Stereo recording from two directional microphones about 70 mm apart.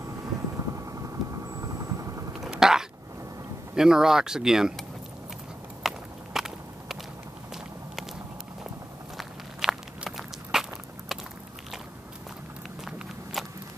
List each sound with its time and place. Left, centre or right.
0.6 s vehicle: right
2.4 s a sound: centre
3.7 s speech: centre
5.8 s walk: centre
9.6 s walk: centre
12.8 s walk: centre